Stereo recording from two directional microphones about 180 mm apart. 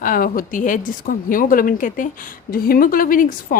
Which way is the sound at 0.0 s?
50° left (ahead or behind).